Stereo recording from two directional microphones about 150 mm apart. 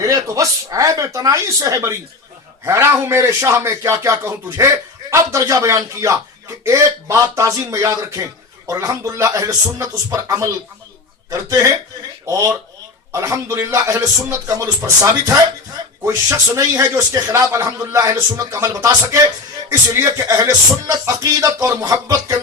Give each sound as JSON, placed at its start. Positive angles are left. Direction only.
{"t": 0.0, "sound": "a man's voice", "side_deg": -20}